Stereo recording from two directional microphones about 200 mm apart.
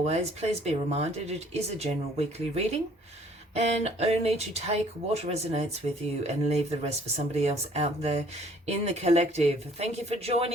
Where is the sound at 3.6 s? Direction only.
30° right (ahead or behind).